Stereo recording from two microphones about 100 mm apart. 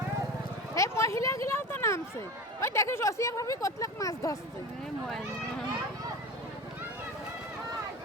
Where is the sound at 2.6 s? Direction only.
25° left (ahead or behind).